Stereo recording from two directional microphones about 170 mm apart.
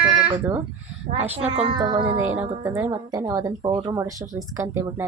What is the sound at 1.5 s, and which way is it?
Speech, 35° right (ahead or behind).